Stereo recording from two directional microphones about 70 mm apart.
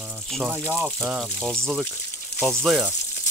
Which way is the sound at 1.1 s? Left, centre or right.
Centre.